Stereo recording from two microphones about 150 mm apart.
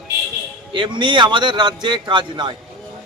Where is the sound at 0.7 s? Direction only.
30° right (ahead or behind).